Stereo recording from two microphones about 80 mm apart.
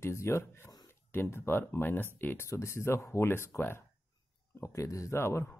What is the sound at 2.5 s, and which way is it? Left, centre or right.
Speech, left.